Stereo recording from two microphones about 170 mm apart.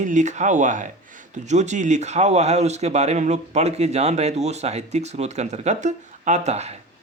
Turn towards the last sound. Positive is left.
turn(degrees=-40)  # may be behind; listen again after turning